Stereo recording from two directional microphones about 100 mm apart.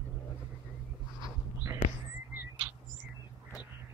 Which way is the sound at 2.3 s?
15° right (ahead or behind).